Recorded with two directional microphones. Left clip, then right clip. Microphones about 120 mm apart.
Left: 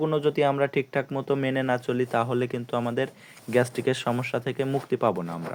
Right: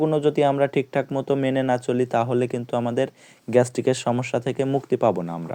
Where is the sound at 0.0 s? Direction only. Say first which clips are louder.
Right 4 dB; 20° right (ahead or behind).